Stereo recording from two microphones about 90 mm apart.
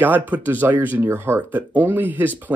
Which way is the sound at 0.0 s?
20° right (ahead or behind).